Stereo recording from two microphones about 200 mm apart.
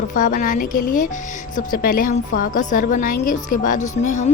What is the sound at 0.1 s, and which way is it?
A woman's voice, 40° left (ahead or behind).